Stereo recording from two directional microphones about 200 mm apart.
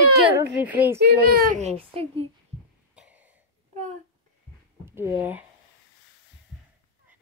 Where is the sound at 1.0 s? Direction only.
55° right (ahead or behind); by 2.3 s 30° right (ahead or behind).